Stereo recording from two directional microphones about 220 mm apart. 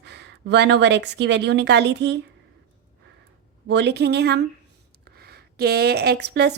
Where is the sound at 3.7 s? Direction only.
50° right (ahead or behind).